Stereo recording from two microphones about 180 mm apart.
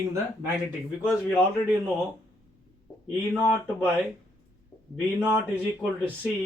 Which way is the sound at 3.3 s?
10° right (ahead or behind).